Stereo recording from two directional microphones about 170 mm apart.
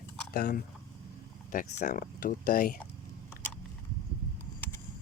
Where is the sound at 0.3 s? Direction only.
55° left (ahead or behind).